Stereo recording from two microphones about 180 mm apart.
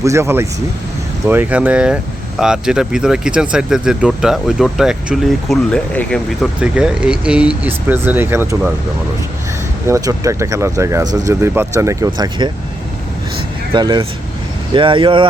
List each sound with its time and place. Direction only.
0.0 s speech: 15° right (ahead or behind); by 6.5 s 5° left (ahead or behind)
6.6 s speech: 5° right (ahead or behind)
9.8 s speech: 15° right (ahead or behind)
13.7 s speech: 25° right (ahead or behind)